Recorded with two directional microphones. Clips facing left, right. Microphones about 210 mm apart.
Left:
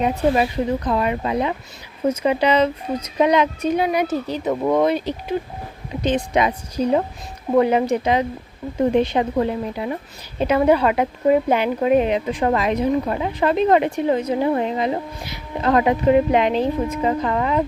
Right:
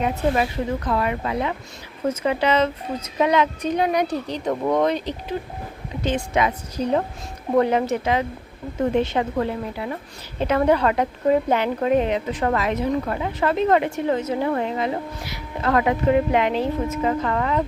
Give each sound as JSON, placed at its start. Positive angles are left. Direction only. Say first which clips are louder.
{"t": 0.9, "sound": "a woman's voice", "louder": "left 2 dB", "side_deg": 20}